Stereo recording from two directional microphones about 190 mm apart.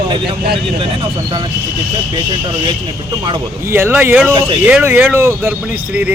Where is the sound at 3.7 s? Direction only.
10° right (ahead or behind).